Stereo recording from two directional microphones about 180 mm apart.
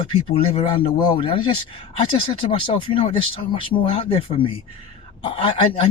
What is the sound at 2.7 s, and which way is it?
Speech, 35° left (ahead or behind).